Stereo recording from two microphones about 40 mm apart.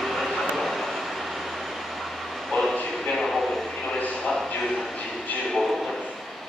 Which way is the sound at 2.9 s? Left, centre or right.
Centre.